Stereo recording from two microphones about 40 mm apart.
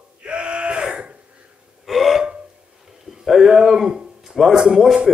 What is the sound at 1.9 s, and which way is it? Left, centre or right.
Hiccup, centre.